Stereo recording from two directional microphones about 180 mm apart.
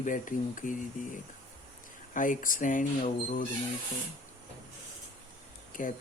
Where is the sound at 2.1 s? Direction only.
45° left (ahead or behind).